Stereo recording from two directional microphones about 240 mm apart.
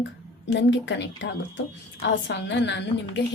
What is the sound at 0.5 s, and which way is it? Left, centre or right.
A woman's voice, left.